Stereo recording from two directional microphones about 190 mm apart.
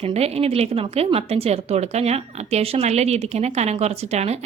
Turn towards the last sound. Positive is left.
turn(degrees=-35)  # may be behind; listen again after turning